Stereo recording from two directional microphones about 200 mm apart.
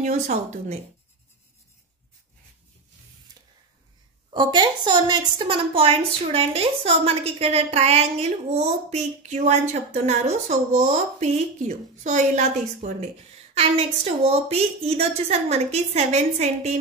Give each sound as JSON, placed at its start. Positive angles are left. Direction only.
{"t": 0.0, "sound": "a woman's voice", "side_deg": -35}
{"t": 4.3, "sound": "a woman's voice", "side_deg": -25}